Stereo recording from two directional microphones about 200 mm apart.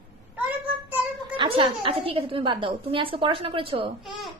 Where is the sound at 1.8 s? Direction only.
25° right (ahead or behind).